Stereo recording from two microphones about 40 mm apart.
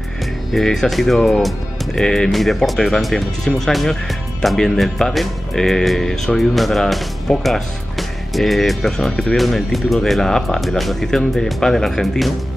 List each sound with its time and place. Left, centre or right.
0.5 s speech: centre
7.3 s speech: centre
8.3 s speech: centre
9.1 s speech: centre
9.4 s speech: centre
11.1 s speech: centre